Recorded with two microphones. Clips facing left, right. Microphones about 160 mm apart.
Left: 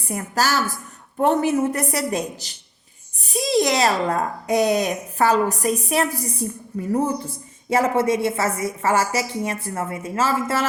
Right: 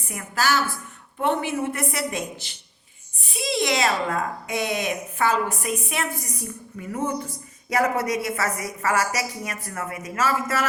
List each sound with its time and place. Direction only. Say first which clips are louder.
0.1 s a woman's voice: left 2 dB; 40° left (ahead or behind)